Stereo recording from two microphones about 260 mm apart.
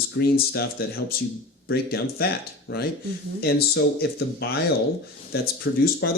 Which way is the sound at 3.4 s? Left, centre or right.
Left.